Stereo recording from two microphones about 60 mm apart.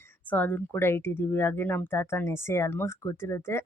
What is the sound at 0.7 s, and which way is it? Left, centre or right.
Speech, left.